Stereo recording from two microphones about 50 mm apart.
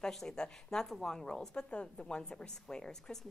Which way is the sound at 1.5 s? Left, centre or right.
Left.